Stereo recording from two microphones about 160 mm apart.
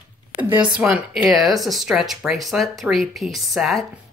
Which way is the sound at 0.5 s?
10° right (ahead or behind).